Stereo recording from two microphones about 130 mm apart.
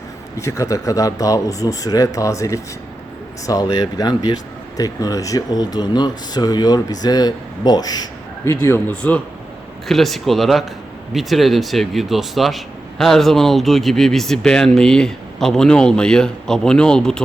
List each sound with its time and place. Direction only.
0.3 s speech: 25° left (ahead or behind)
8.4 s speech: 20° left (ahead or behind)